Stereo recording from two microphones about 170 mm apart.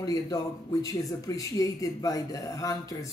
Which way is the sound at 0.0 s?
20° left (ahead or behind).